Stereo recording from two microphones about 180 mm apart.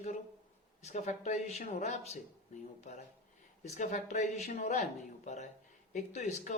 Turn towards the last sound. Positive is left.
turn(degrees=40)  # may be behind; listen again after turning